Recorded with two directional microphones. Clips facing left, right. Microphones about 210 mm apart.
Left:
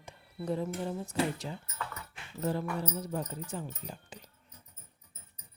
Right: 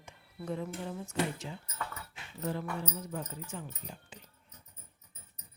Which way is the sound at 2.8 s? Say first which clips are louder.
Left 4 dB; 35° left (ahead or behind).